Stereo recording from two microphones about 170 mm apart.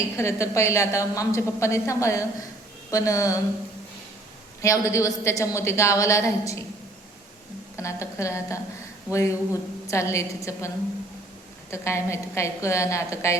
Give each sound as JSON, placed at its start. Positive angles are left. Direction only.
{"t": 0.2, "sound": "a woman's voice", "side_deg": 15}
{"t": 4.6, "sound": "a woman's voice", "side_deg": 20}
{"t": 7.8, "sound": "a woman's voice", "side_deg": 15}
{"t": 11.7, "sound": "a woman's voice", "side_deg": 15}